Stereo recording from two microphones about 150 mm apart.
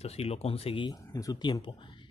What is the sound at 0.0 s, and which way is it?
Speech, 45° left (ahead or behind).